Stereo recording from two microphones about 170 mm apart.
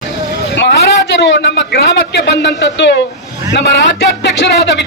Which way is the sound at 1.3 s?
90° left.